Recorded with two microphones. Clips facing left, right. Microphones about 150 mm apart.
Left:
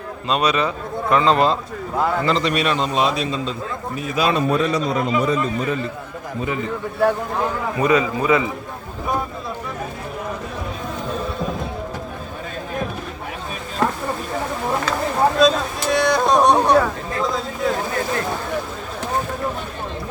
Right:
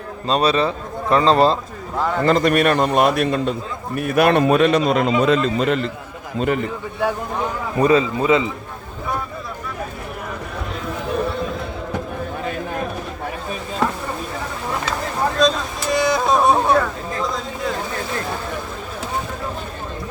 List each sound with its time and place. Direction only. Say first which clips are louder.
0.3 s a man's voice: right 2 dB; 35° right (ahead or behind)
2.2 s a man's voice: right 4 dB; 50° right (ahead or behind); by 5.1 s 75° right (ahead or behind)
5.2 s a man's voice: right 4 dB; 90° right; by 6.7 s 65° right (ahead or behind)
7.8 s a man's voice: right 3 dB; 30° right (ahead or behind)
15.4 s a sound: left 2 dB; 5° left (ahead or behind)